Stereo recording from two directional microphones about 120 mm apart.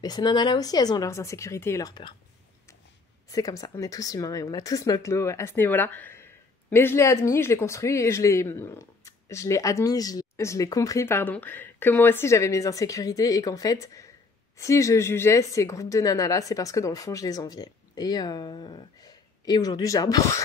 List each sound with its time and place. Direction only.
0.0 s speech: 35° left (ahead or behind)
3.3 s speech: 30° left (ahead or behind)